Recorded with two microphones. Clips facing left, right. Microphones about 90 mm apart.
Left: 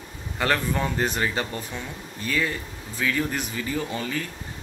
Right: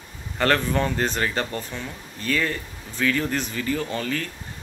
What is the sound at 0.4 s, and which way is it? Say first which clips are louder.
Speech: right 3 dB; 5° left (ahead or behind).